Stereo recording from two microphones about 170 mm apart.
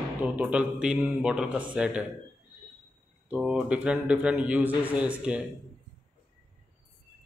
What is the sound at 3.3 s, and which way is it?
Speech, 5° right (ahead or behind).